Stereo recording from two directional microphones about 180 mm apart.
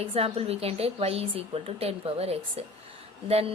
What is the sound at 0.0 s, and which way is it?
Speech, 35° right (ahead or behind).